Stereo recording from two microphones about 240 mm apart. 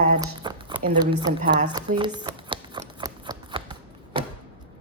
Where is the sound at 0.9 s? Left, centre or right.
Centre.